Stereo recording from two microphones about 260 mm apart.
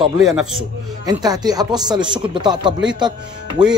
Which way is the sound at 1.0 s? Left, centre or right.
Centre.